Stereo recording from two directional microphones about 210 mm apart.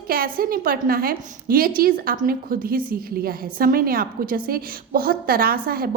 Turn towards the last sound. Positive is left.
turn(degrees=-45)  # may be behind; listen again after turning